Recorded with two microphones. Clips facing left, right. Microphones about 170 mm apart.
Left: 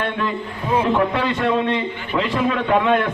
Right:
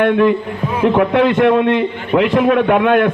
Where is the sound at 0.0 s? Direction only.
65° right (ahead or behind).